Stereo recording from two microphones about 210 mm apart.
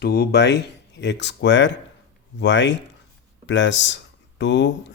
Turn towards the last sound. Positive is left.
turn(degrees=55)  # may be behind; listen again after turning